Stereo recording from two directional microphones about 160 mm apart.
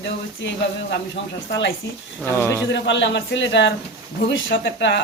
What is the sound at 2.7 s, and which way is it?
Speech, 90° left.